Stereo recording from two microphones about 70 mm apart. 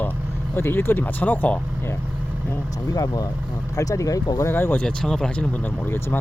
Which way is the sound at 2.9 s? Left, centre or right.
Left.